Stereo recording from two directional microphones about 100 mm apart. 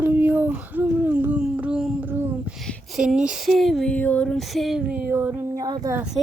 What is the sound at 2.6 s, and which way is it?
Speech, 5° right (ahead or behind).